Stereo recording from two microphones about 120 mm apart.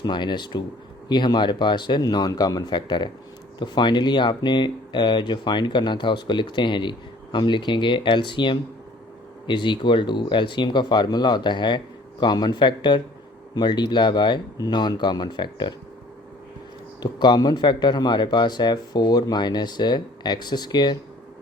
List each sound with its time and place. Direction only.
0.0 s speech: 40° left (ahead or behind)
17.0 s speech: 40° left (ahead or behind)